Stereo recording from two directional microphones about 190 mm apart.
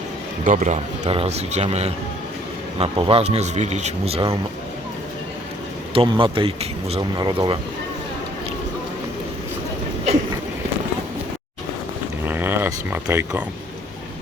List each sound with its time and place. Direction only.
0.4 s a man's voice: 40° right (ahead or behind)
5.9 s speech: 25° right (ahead or behind)
12.2 s a sound: 10° right (ahead or behind)